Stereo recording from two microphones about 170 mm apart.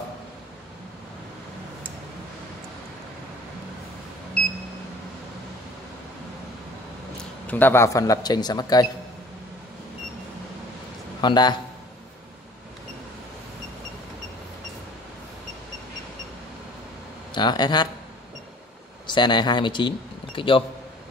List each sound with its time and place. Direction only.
7.4 s speech: 10° left (ahead or behind)
11.1 s a man's voice: 25° left (ahead or behind)
17.3 s speech: 25° left (ahead or behind)
19.0 s speech: 25° left (ahead or behind)